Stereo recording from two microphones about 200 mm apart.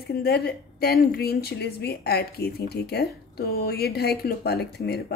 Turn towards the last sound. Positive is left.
turn(degrees=55)  # may be behind; listen again after turning